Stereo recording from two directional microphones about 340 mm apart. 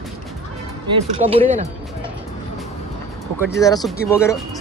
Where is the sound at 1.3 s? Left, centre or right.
Centre.